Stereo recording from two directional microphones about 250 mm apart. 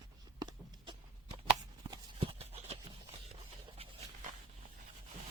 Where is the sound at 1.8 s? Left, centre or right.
Centre.